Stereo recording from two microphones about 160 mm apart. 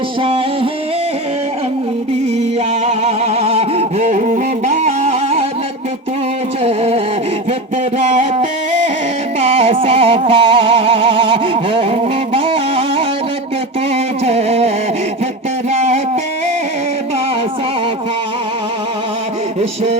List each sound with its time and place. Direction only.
0.2 s music: 35° right (ahead or behind)
2.8 s music: 40° right (ahead or behind)
6.6 s a sound: 40° right (ahead or behind)
7.9 s music: 50° right (ahead or behind)
15.7 s music: 45° right (ahead or behind)